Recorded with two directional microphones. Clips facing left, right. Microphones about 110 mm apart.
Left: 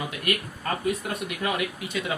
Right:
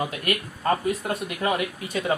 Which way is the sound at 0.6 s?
35° right (ahead or behind).